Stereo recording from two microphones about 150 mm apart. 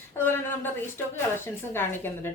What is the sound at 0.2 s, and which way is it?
A woman's voice, 15° left (ahead or behind).